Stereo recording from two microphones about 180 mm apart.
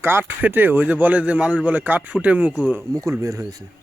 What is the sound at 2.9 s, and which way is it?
Speech, 20° right (ahead or behind).